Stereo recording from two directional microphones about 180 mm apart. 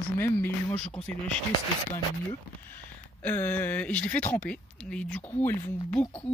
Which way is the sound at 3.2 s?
10° left (ahead or behind).